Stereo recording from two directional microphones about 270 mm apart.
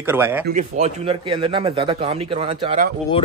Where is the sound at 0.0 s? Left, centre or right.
Centre.